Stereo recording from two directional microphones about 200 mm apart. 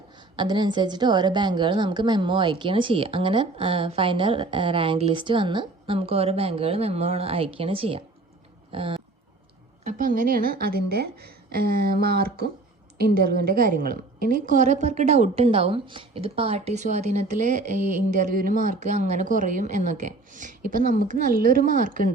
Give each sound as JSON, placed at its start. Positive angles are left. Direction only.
{"t": 0.3, "sound": "a woman's voice", "side_deg": -20}
{"t": 9.8, "sound": "a woman's voice", "side_deg": -40}